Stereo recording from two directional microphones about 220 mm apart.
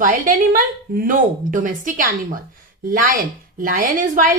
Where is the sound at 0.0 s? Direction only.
40° right (ahead or behind).